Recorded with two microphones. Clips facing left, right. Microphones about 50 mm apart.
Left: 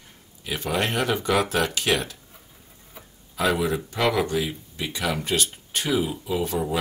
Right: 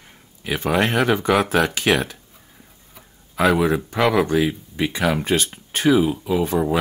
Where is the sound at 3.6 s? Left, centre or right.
Right.